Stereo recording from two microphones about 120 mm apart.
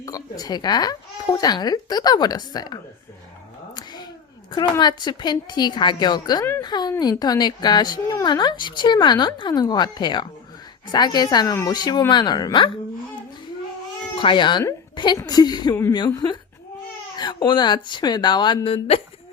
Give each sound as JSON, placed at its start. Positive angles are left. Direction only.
{"t": 0.0, "sound": "speech", "side_deg": 30}
{"t": 4.8, "sound": "speech", "side_deg": 40}
{"t": 6.6, "sound": "a sound", "side_deg": 35}
{"t": 7.0, "sound": "speech", "side_deg": 35}
{"t": 14.2, "sound": "a woman's voice", "side_deg": 45}
{"t": 17.2, "sound": "speech", "side_deg": 35}